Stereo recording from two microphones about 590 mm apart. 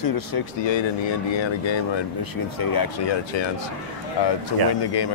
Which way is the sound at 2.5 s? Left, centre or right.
Left.